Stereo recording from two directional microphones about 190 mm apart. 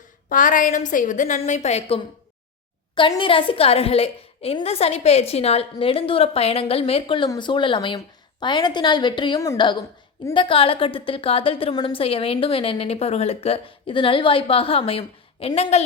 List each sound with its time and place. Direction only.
0.3 s a woman's voice: 45° left (ahead or behind)